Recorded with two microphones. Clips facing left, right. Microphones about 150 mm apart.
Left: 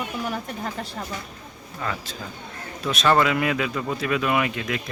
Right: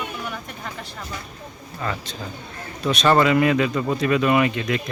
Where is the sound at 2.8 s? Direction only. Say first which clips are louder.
Right 3 dB; centre (ahead or behind).